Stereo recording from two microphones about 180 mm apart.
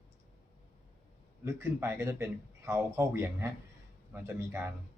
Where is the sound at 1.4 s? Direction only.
15° right (ahead or behind).